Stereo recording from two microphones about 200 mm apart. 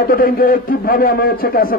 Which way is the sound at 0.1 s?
45° left (ahead or behind).